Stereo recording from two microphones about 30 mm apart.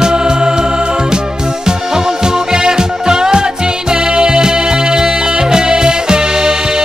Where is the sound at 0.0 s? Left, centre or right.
Right.